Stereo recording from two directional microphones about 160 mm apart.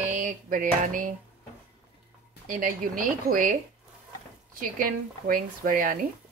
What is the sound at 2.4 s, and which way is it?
Speech, 55° right (ahead or behind).